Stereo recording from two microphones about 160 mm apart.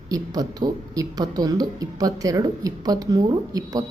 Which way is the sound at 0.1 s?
25° right (ahead or behind).